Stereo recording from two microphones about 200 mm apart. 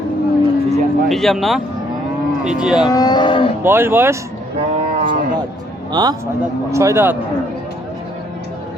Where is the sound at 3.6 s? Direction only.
10° right (ahead or behind).